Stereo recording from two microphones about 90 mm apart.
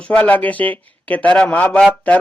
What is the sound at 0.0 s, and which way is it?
Speech, 15° left (ahead or behind).